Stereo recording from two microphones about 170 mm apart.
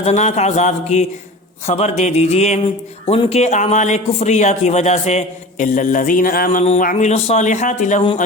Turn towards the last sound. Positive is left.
turn(degrees=45)  # may be behind; listen again after turning